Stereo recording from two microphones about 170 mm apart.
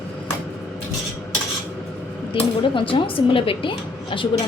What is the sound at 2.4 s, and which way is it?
A woman's voice, 30° left (ahead or behind).